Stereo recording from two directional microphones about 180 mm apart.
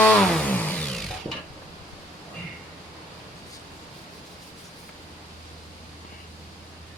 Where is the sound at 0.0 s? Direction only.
5° left (ahead or behind).